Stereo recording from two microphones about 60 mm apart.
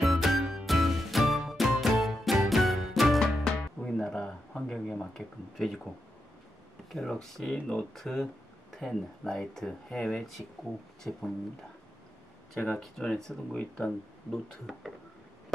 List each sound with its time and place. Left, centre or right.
0.0 s music: centre
6.9 s speech: centre
12.7 s speech: centre
13.6 s speech: centre